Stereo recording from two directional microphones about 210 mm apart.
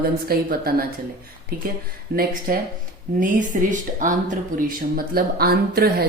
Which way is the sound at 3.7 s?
40° right (ahead or behind).